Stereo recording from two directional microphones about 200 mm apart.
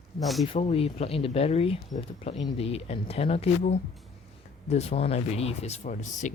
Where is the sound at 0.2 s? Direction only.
Centre (ahead or behind).